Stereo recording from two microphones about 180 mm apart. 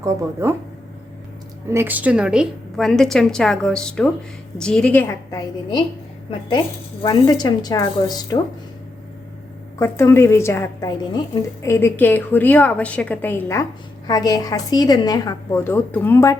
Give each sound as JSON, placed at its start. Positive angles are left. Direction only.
{"t": 0.0, "sound": "speech", "side_deg": -15}
{"t": 1.7, "sound": "a woman's voice", "side_deg": -10}
{"t": 7.0, "sound": "a woman's voice", "side_deg": 20}
{"t": 9.7, "sound": "a woman's voice", "side_deg": 15}